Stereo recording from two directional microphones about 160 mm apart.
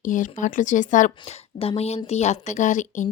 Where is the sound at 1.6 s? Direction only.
40° left (ahead or behind).